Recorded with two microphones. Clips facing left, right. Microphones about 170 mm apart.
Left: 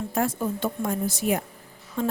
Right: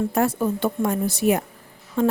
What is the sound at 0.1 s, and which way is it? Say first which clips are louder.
A woman's voice: right 4 dB; 65° right (ahead or behind).